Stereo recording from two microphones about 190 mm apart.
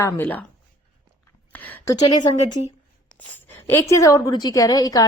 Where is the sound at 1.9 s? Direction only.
20° left (ahead or behind).